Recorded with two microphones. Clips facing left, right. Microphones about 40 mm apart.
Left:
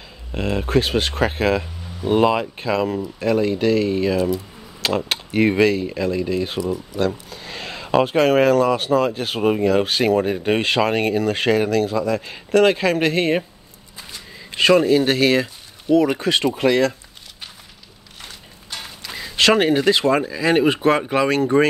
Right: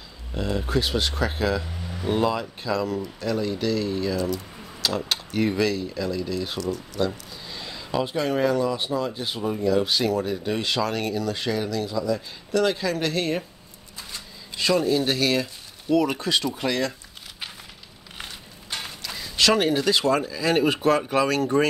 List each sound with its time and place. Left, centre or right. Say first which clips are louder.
0.3 s speech: left 5 dB; left
6.6 s speech: left 5 dB; centre
7.0 s speech: left 5 dB; left
14.5 s speech: left 7 dB; left
19.0 s a sound: left 3 dB; left
19.3 s speech: left 5 dB; left